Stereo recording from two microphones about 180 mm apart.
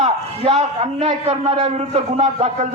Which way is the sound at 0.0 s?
40° right (ahead or behind).